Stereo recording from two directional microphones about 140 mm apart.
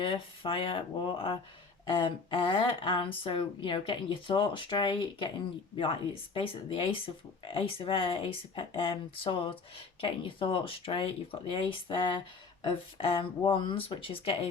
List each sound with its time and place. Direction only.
0.0 s speech: 40° left (ahead or behind)
6.3 s speech: 40° left (ahead or behind)